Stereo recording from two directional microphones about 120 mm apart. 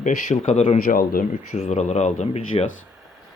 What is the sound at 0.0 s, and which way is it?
Speech, 90° left.